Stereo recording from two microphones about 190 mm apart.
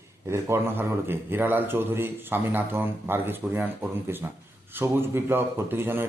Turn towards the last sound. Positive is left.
turn(degrees=-10)  # may be behind; listen again after turning